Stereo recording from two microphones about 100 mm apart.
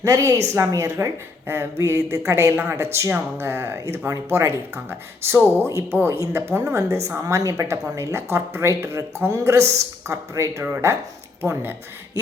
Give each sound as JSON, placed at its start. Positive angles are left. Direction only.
{"t": 0.0, "sound": "a woman's voice", "side_deg": -30}